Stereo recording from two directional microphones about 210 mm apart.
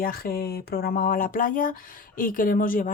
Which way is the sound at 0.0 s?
45° left (ahead or behind).